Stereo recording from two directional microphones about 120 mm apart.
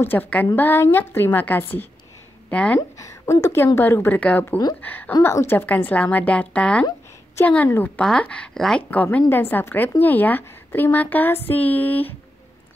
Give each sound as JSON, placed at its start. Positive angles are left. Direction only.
{"t": 0.0, "sound": "a woman's voice", "side_deg": 15}
{"t": 3.0, "sound": "a woman's voice", "side_deg": 25}